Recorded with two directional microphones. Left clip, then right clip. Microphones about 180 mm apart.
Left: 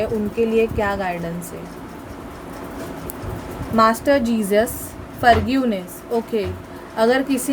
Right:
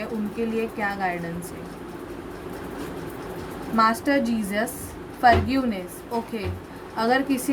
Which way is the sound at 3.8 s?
40° left (ahead or behind).